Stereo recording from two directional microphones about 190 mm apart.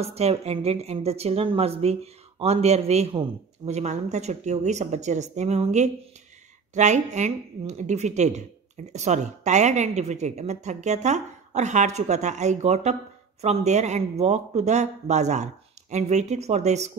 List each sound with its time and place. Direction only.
0.0 s speech: 35° right (ahead or behind)